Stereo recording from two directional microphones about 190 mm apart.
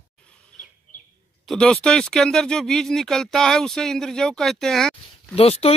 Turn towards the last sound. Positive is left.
turn(degrees=30)  # may be behind; listen again after turning